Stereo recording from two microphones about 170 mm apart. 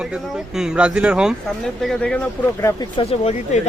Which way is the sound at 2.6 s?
25° left (ahead or behind).